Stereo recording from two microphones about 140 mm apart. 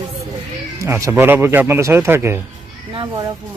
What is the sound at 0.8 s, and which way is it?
Speech, 20° right (ahead or behind).